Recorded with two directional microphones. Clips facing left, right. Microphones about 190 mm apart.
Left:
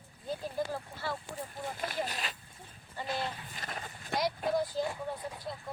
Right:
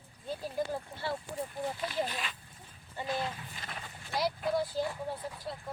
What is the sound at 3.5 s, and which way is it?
Horse, 45° left (ahead or behind).